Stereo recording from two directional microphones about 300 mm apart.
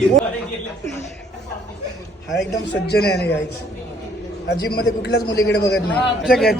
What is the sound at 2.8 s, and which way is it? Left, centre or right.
Speech, left.